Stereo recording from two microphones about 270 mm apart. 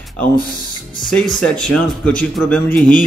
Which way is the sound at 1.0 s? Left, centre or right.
Centre.